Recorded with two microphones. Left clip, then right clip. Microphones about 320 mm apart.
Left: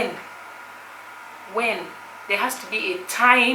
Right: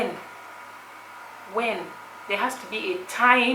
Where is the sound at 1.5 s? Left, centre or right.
Centre.